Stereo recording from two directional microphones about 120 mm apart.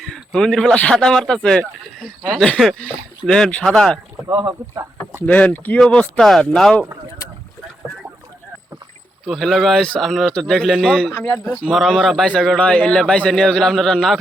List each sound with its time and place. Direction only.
0.0 s speech: 5° left (ahead or behind)
5.2 s speech: 10° left (ahead or behind)
9.2 s speech: centre (ahead or behind)
11.1 s speech: 15° left (ahead or behind)
11.4 s speech: 5° right (ahead or behind)